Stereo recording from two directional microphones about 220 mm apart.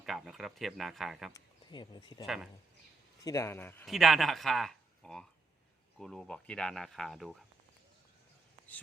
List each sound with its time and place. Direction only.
0.0 s speech: centre (ahead or behind)
1.3 s speech: 20° left (ahead or behind)
2.2 s speech: centre (ahead or behind)
3.2 s a man's voice: 15° left (ahead or behind)